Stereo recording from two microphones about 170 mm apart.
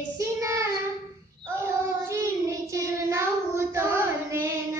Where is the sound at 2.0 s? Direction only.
15° right (ahead or behind).